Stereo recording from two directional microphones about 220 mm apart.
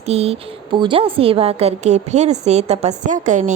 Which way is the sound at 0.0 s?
30° right (ahead or behind).